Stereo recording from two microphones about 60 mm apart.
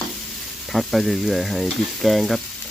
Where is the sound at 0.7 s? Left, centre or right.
Centre.